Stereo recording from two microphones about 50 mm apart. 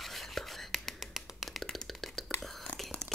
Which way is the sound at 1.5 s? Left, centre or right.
Centre.